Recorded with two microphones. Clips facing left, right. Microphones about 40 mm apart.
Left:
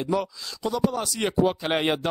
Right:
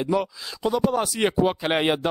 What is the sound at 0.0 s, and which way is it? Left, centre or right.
A man's voice, centre.